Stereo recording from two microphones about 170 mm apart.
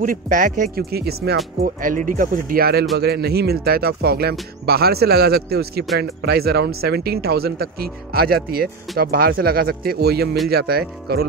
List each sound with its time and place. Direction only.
0.0 s speech: 55° right (ahead or behind); by 1.7 s 70° right (ahead or behind)
1.8 s speech: 50° right (ahead or behind); by 11.2 s 65° right (ahead or behind)